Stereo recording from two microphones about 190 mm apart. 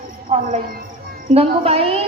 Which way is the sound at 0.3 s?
35° right (ahead or behind).